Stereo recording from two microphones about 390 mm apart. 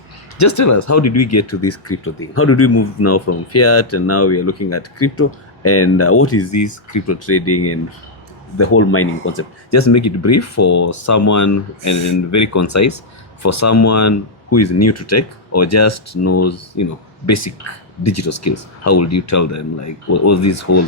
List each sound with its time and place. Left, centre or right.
0.3 s speech: left